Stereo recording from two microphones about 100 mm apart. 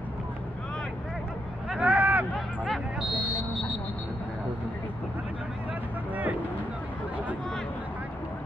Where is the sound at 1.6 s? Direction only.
10° right (ahead or behind).